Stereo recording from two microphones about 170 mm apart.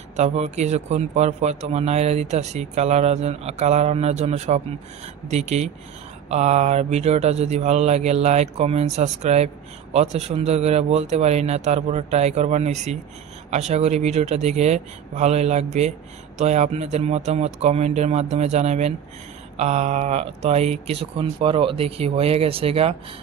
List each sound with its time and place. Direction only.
0.1 s speech: 40° right (ahead or behind)